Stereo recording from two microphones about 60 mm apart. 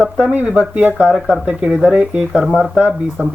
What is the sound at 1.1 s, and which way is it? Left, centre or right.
Speech, centre.